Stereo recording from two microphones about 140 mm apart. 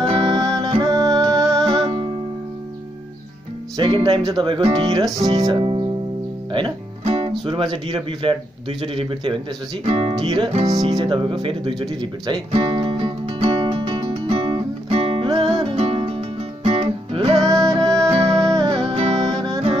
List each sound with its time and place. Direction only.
0.0 s music: 40° right (ahead or behind)
3.7 s speech: 35° right (ahead or behind)
4.7 s music: 30° right (ahead or behind)
5.4 s music: 40° right (ahead or behind)
6.5 s speech: 40° right (ahead or behind)
10.1 s speech: 30° right (ahead or behind)
12.0 s music: 35° right (ahead or behind)
17.4 s music: 25° right (ahead or behind)
18.1 s music: 45° right (ahead or behind)
19.1 s music: 30° right (ahead or behind)